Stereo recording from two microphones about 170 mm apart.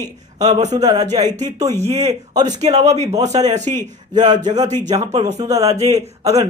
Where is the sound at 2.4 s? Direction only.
40° right (ahead or behind).